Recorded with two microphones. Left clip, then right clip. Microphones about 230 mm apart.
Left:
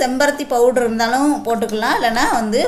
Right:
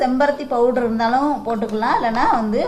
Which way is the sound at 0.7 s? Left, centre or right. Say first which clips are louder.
Left 2 dB; left.